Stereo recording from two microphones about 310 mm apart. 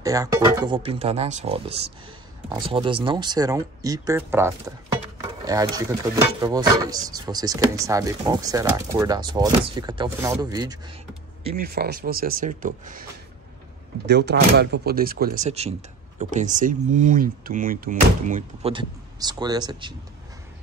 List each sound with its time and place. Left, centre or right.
0.0 s speech: centre
11.5 s speech: right
14.0 s speech: right; by 20.0 s centre